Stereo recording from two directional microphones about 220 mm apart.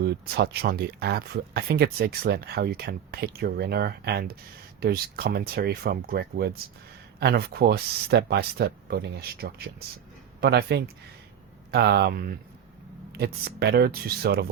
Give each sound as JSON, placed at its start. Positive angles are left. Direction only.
{"t": 0.0, "sound": "speech", "side_deg": -50}